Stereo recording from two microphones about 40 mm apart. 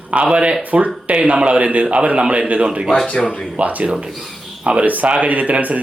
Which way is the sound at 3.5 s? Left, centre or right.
Right.